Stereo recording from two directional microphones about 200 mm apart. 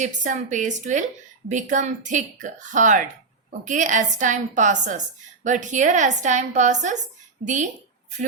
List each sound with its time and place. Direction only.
0.0 s a woman's voice: 40° right (ahead or behind)